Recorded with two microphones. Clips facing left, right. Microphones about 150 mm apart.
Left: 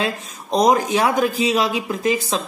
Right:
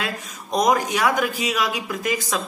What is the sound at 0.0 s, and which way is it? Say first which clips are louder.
Speech: left 5 dB; 30° left (ahead or behind).